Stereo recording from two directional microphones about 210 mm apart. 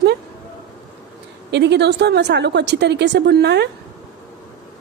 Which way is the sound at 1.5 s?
55° right (ahead or behind).